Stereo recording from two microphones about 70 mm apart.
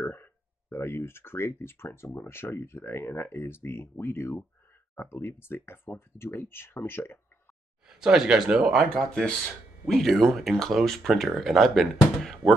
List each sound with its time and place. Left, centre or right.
0.0 s a sound: left
2.0 s speech: left
7.8 s speech: centre
8.8 s speech: centre